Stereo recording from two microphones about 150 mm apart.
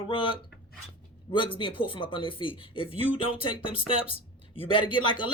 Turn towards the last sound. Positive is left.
turn(degrees=35)  # may be behind; listen again after turning